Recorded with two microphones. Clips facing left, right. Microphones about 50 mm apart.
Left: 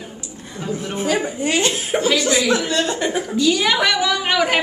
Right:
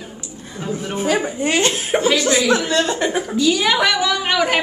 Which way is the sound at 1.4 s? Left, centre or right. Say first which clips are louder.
Right 1 dB; right.